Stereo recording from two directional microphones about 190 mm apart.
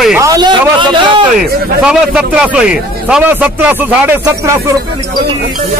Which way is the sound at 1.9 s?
5° right (ahead or behind).